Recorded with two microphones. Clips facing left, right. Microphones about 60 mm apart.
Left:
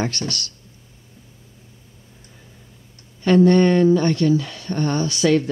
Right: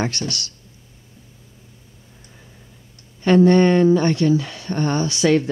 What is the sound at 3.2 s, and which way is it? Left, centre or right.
Speech, right.